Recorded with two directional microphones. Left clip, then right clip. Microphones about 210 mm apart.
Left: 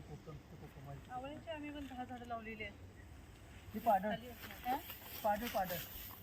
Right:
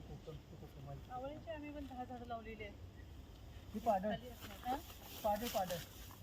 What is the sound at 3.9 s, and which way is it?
Speech, 5° right (ahead or behind).